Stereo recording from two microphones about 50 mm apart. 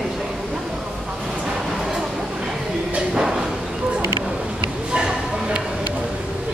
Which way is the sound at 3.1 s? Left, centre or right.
Centre.